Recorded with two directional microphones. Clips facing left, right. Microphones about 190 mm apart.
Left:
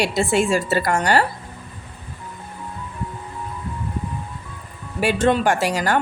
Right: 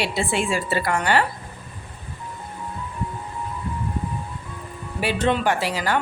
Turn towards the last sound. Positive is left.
turn(degrees=45)  # may be behind; listen again after turning